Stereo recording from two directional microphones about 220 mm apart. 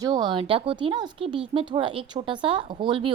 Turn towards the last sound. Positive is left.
turn(degrees=-25)  # may be behind; listen again after turning